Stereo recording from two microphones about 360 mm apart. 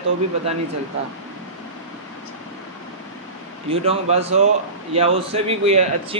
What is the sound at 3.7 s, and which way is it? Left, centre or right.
A man's voice, centre.